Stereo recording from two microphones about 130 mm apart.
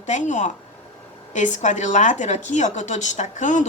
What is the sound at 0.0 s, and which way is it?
Speech, 70° left (ahead or behind).